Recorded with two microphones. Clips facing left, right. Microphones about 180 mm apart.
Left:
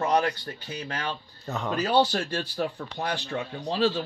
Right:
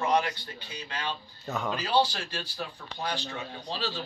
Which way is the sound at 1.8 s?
55° left (ahead or behind).